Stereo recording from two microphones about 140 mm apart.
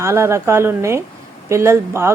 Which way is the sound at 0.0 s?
20° right (ahead or behind).